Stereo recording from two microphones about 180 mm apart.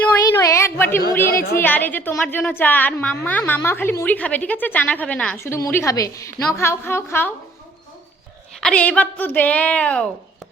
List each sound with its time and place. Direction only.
0.0 s a sound: 15° left (ahead or behind)
1.3 s a woman's voice: 55° left (ahead or behind)
1.5 s a woman's voice: 10° left (ahead or behind)
8.6 s a woman's voice: 5° left (ahead or behind)